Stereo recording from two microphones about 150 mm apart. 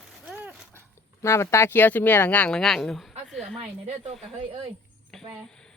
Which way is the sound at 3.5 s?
45° right (ahead or behind).